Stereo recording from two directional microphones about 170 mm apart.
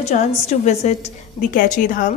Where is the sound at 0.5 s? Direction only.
40° left (ahead or behind).